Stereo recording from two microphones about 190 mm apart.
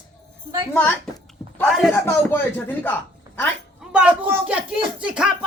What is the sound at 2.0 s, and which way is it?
Speech, 10° left (ahead or behind).